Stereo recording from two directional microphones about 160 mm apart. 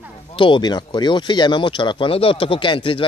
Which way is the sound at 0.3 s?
30° left (ahead or behind).